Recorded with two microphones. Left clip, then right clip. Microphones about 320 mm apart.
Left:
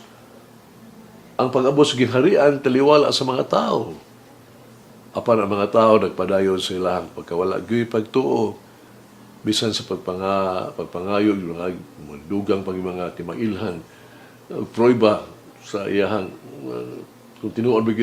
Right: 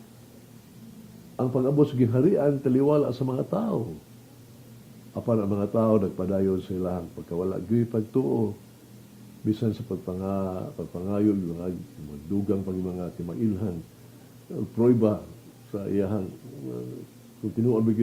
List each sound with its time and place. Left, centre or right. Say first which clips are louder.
1.4 s speech: left 7 dB; centre
5.1 s speech: left 9 dB; centre
8.2 s speech: left 7 dB; left
9.5 s speech: left 8 dB; centre